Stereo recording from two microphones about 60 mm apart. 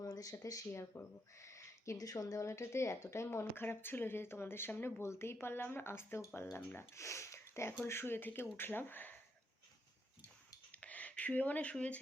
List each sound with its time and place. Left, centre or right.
0.0 s speech: left
0.7 s speech: left
7.0 s speech: left
10.7 s a sound: left
11.7 s speech: left